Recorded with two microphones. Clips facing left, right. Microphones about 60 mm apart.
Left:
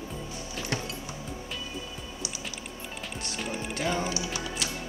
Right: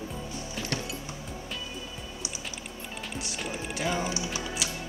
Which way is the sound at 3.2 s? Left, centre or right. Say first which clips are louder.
Left 3 dB; centre.